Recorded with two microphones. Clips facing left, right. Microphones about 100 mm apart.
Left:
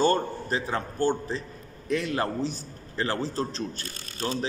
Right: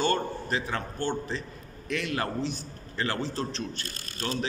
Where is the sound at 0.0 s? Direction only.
35° left (ahead or behind).